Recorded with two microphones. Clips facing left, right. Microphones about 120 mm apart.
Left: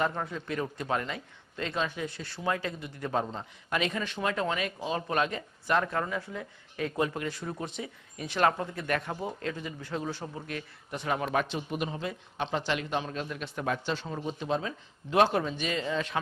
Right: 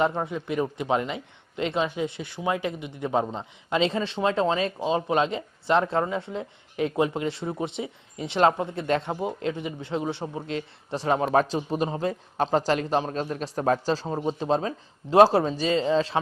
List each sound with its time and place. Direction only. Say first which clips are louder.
0.0 s a man's voice: right 6 dB; 20° right (ahead or behind)